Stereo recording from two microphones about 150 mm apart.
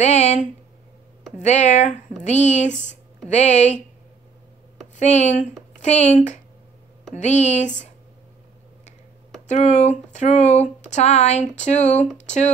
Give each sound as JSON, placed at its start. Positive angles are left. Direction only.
{"t": 0.0, "sound": "speech", "side_deg": 50}
{"t": 4.9, "sound": "speech", "side_deg": 50}
{"t": 9.5, "sound": "speech", "side_deg": 50}